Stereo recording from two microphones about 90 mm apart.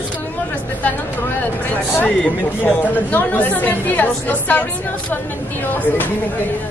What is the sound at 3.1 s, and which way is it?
Speech, 20° left (ahead or behind).